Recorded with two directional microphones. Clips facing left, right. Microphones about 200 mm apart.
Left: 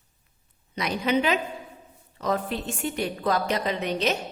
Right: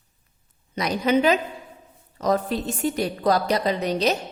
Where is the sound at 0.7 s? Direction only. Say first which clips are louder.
Right 4 dB; 40° right (ahead or behind).